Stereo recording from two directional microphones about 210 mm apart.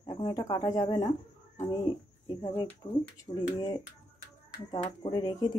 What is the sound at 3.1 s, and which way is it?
Speech, 15° left (ahead or behind).